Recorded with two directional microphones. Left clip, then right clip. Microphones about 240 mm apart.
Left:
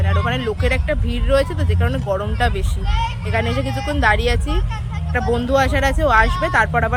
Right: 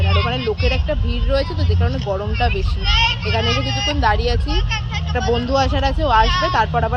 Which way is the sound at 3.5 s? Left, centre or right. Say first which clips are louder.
Right 3 dB; left.